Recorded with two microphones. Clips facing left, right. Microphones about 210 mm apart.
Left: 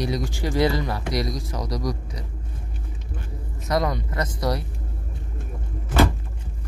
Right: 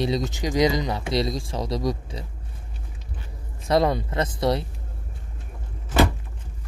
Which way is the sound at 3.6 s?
30° right (ahead or behind).